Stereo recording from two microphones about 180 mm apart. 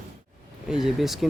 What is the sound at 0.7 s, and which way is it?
Speech, centre (ahead or behind).